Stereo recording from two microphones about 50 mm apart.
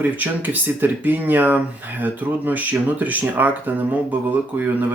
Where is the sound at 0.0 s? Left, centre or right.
Right.